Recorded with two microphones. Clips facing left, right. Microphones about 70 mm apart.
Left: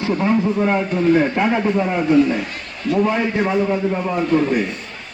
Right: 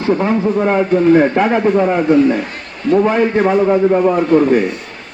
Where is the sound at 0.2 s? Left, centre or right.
Right.